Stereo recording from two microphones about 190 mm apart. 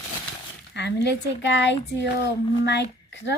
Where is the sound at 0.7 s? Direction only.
65° left (ahead or behind).